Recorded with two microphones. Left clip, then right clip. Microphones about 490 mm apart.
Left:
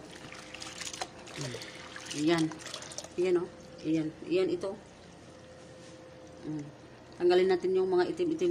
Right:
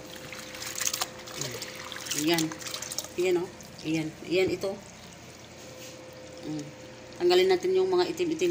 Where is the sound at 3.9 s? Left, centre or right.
Left.